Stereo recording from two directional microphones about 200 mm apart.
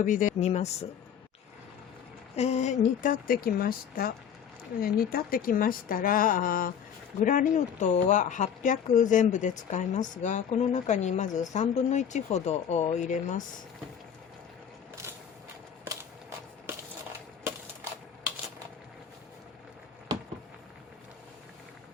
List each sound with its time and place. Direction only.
0.0 s speech: 40° left (ahead or behind)
2.3 s a woman's voice: 35° left (ahead or behind)